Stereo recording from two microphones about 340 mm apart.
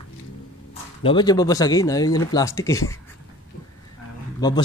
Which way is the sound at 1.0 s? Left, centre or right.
Centre.